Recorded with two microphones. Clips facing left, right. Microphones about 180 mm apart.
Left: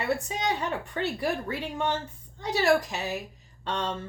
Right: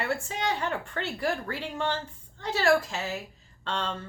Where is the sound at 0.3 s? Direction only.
15° left (ahead or behind).